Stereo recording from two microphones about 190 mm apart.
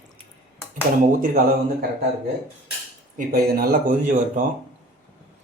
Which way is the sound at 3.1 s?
50° right (ahead or behind).